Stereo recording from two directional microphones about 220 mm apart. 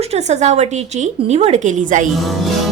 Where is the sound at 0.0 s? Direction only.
30° right (ahead or behind).